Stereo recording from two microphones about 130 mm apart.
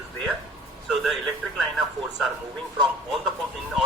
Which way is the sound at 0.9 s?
Centre (ahead or behind).